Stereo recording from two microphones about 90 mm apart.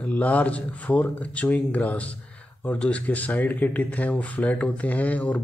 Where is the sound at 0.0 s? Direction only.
15° left (ahead or behind).